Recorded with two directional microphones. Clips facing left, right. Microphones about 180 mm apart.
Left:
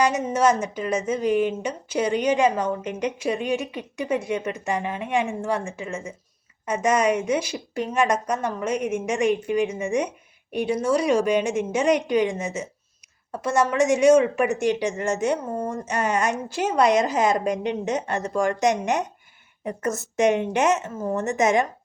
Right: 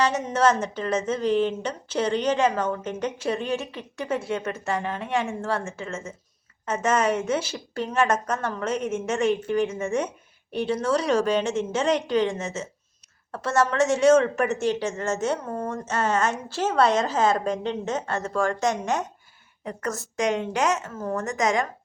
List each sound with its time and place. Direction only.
0.0 s a woman's voice: 10° left (ahead or behind)